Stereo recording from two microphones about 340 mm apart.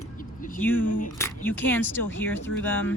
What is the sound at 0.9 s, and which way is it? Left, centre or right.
Speech, left.